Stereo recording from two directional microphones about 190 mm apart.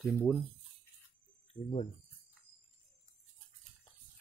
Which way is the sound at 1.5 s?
30° left (ahead or behind).